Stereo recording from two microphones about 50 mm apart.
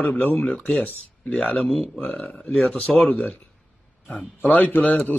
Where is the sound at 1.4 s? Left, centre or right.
Left.